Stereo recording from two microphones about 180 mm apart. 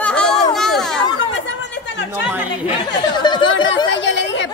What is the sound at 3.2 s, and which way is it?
Chatter, 25° left (ahead or behind).